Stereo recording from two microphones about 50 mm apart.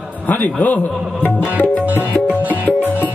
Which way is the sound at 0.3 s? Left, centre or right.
Left.